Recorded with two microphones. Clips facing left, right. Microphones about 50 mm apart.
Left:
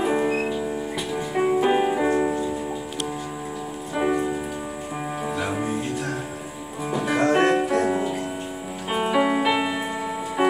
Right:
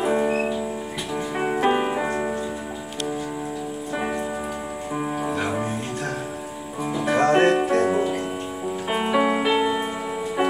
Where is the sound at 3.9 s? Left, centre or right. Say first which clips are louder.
Left 5 dB; centre.